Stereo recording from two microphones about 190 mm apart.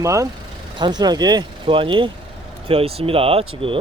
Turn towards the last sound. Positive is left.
turn(degrees=-30)  # may be behind; listen again after turning